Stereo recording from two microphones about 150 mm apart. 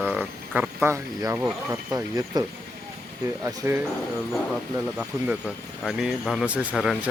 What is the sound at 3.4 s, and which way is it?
Speech, 15° right (ahead or behind).